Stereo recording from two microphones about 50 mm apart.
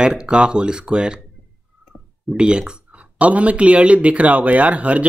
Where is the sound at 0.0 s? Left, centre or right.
Centre.